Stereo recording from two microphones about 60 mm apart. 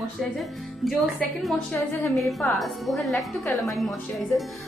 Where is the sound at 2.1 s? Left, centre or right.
Centre.